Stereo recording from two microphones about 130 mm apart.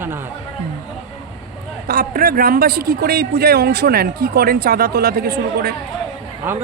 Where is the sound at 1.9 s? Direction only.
90° right.